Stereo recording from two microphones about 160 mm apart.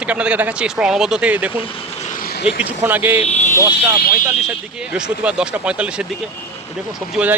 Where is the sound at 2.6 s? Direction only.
10° right (ahead or behind).